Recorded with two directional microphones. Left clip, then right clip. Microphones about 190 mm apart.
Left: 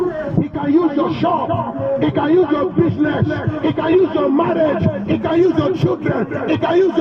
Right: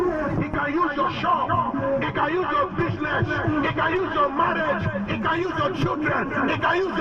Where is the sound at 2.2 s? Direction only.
35° left (ahead or behind).